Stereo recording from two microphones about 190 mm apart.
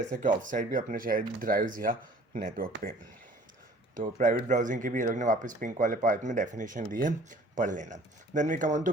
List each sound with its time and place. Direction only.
0.1 s speech: 40° right (ahead or behind)
3.9 s speech: 45° right (ahead or behind)